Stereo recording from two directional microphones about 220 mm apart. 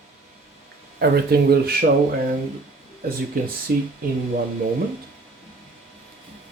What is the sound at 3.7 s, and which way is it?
Speech, 45° right (ahead or behind).